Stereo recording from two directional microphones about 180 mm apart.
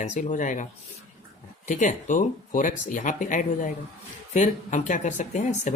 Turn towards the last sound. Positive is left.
turn(degrees=40)  # may be behind; listen again after turning